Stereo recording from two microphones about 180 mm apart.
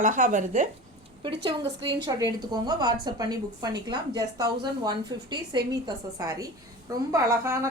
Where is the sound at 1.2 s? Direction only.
25° right (ahead or behind).